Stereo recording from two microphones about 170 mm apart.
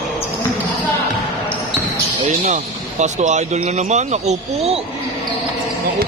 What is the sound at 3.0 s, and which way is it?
Speech, 45° right (ahead or behind).